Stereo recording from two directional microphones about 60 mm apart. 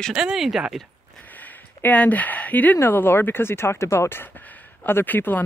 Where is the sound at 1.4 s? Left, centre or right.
Left.